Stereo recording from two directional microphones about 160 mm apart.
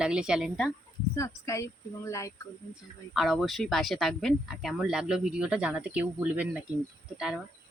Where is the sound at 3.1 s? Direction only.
Centre (ahead or behind).